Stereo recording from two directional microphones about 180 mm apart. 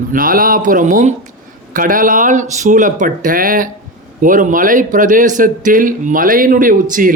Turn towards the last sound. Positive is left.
turn(degrees=-50)  # may be behind; listen again after turning